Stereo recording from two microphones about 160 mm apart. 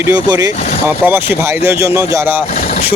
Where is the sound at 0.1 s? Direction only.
20° right (ahead or behind).